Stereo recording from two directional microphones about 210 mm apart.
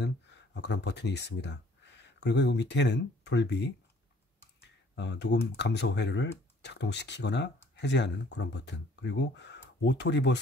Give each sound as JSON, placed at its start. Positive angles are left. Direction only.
{"t": 0.0, "sound": "speech", "side_deg": 55}
{"t": 4.9, "sound": "speech", "side_deg": 55}